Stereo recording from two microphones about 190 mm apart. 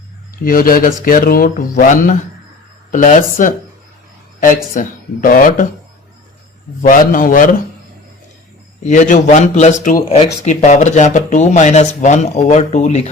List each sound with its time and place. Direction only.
0.4 s speech: 50° left (ahead or behind)
6.8 s speech: 45° left (ahead or behind)
8.8 s speech: 40° left (ahead or behind)